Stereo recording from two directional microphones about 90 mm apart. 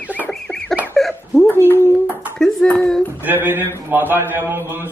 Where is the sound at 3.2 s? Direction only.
25° right (ahead or behind).